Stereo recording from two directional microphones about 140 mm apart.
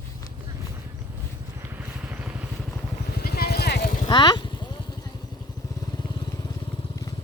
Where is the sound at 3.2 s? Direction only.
90° left.